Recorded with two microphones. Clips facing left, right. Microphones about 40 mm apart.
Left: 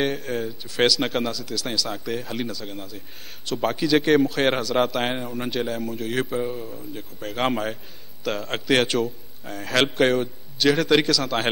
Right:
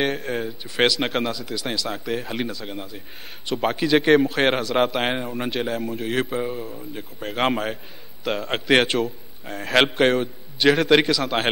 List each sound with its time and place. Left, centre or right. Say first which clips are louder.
0.0 s speech: right 1 dB; centre
9.0 s a man's voice: even; centre
9.8 s a man's voice: right 2 dB; centre
10.0 s speech: right 1 dB; centre